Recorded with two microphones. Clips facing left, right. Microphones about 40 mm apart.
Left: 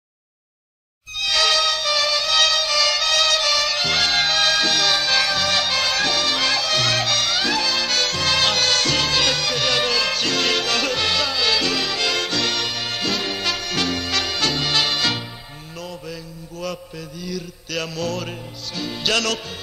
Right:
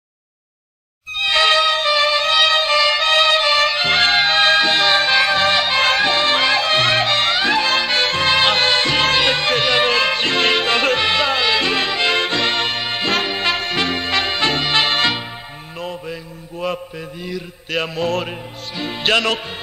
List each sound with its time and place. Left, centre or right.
1.1 s music: right
15.8 s mantra: right
18.8 s speech: right